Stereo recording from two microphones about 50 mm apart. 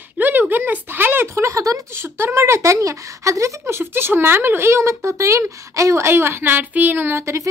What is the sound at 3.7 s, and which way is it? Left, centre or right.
Speech, right.